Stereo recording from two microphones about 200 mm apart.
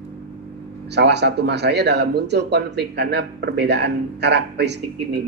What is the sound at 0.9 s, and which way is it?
Speech, 55° right (ahead or behind).